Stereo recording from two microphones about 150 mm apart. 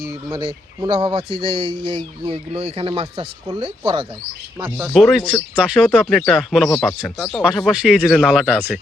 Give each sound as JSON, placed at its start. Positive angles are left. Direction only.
{"t": 0.3, "sound": "speech", "side_deg": -25}
{"t": 4.5, "sound": "speech", "side_deg": -10}